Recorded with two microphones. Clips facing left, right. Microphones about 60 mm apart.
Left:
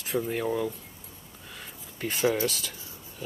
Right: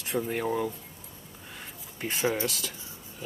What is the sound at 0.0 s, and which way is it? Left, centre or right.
Speech, centre.